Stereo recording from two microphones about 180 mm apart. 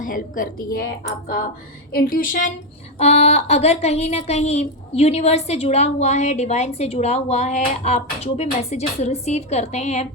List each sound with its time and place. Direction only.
0.0 s a woman's voice: 50° left (ahead or behind)
3.0 s speech: 35° left (ahead or behind)